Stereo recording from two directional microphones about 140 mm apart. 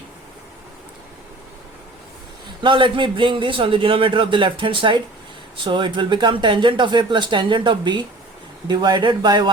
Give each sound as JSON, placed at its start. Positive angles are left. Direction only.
{"t": 2.6, "sound": "a man's voice", "side_deg": -35}